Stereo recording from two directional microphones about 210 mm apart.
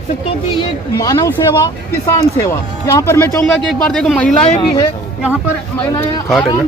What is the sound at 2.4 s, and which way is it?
Speech, 15° left (ahead or behind).